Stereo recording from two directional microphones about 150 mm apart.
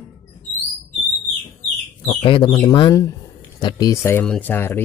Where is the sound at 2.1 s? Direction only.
35° left (ahead or behind).